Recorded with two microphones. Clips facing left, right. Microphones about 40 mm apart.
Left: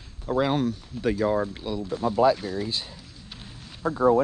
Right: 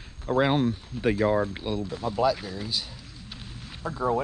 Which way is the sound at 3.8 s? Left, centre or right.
Left.